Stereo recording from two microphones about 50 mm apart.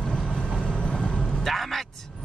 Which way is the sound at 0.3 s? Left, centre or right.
Centre.